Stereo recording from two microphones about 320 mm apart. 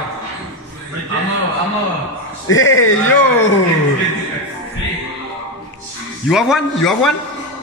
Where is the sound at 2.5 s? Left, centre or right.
Left.